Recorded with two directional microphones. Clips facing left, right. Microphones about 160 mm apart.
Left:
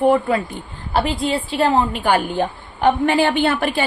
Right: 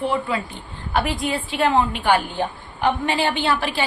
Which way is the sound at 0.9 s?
30° left (ahead or behind).